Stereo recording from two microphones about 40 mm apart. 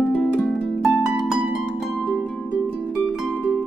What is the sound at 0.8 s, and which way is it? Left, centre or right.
Harp, centre.